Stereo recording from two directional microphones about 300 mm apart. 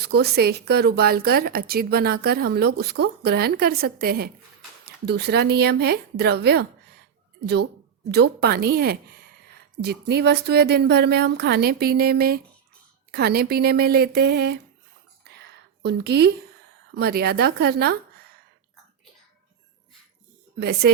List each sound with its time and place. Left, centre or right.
0.0 s speech: right
15.3 s a sound: right
16.9 s speech: right
20.6 s speech: right